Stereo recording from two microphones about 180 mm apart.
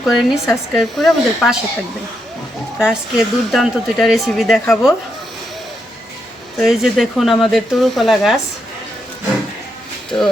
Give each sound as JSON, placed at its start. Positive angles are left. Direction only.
{"t": 0.1, "sound": "speech", "side_deg": 0}
{"t": 2.7, "sound": "speech", "side_deg": -5}
{"t": 6.6, "sound": "speech", "side_deg": 0}
{"t": 10.1, "sound": "speech", "side_deg": 20}